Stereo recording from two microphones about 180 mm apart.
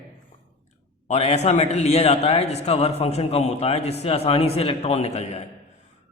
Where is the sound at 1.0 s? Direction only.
40° left (ahead or behind).